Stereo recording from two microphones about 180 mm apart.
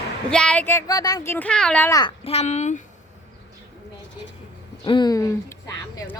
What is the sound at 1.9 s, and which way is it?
Speech, 20° left (ahead or behind).